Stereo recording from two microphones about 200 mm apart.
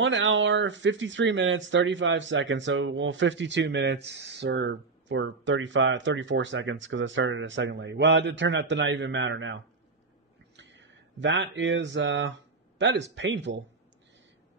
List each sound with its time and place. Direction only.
0.0 s speech: 65° right (ahead or behind)